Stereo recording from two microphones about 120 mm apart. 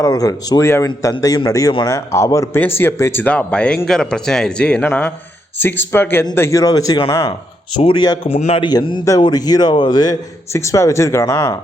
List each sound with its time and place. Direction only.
0.0 s a man's voice: 30° left (ahead or behind)
8.3 s a man's voice: 60° left (ahead or behind)
8.6 s a man's voice: 40° left (ahead or behind)